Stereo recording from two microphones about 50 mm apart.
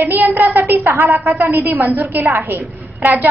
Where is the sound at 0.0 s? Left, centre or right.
Right.